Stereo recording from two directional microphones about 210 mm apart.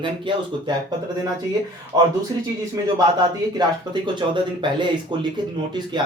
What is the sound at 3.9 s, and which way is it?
Speech, 20° right (ahead or behind).